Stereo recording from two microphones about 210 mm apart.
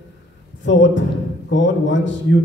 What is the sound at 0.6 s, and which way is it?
A man's voice, 60° left (ahead or behind).